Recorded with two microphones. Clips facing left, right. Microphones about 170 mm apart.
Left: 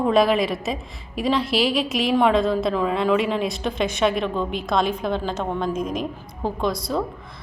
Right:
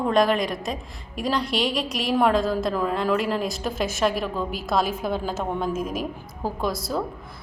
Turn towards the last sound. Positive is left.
turn(degrees=-5)  # may be behind; listen again after turning